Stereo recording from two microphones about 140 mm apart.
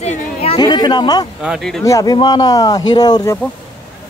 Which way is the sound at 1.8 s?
25° left (ahead or behind).